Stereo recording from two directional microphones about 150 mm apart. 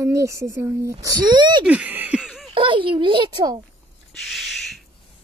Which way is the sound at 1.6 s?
10° right (ahead or behind).